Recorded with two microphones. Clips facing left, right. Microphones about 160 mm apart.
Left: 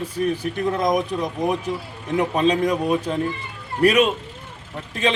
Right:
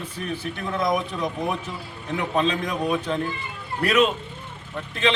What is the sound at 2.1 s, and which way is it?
Speech, 40° left (ahead or behind).